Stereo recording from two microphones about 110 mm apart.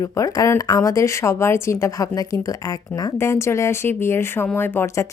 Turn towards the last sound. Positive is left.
turn(degrees=20)  # may be behind; listen again after turning